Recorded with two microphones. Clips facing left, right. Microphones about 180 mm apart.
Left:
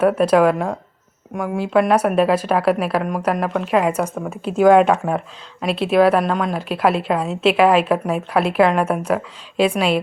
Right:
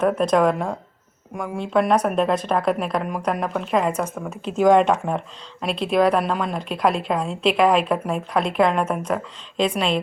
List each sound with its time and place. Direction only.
0.0 s a woman's voice: 5° left (ahead or behind)